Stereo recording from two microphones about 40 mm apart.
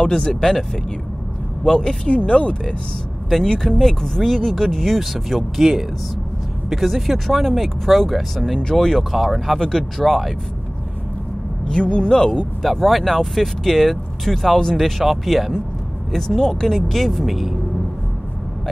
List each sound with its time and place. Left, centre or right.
0.0 s speech: centre
1.7 s speech: centre
2.0 s speech: left
3.4 s speech: centre
9.1 s speech: centre
9.6 s speech: centre
11.6 s speech: left
12.7 s speech: centre